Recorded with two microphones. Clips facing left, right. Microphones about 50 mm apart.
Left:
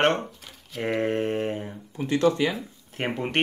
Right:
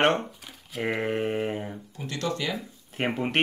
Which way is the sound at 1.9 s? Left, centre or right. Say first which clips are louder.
Left 10 dB; left.